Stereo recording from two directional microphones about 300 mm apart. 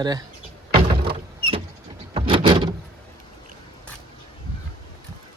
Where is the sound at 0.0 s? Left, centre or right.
Centre.